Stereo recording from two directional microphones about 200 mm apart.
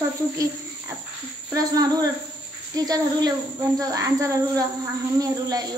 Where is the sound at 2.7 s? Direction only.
20° right (ahead or behind).